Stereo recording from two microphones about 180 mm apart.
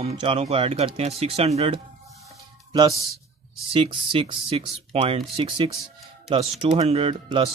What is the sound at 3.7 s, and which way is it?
Speech, 30° right (ahead or behind).